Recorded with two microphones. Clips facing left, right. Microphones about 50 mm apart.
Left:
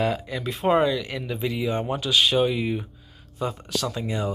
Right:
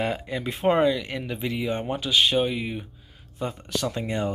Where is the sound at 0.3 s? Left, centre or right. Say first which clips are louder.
Even; centre.